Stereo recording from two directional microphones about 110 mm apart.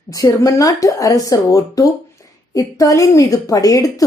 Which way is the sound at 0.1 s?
30° left (ahead or behind).